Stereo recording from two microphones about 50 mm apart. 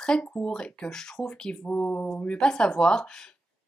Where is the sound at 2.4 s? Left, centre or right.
Centre.